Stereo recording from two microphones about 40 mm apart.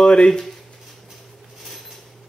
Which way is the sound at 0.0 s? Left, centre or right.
Left.